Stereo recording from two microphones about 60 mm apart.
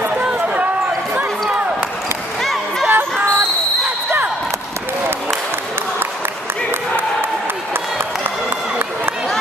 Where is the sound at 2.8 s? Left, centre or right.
Right.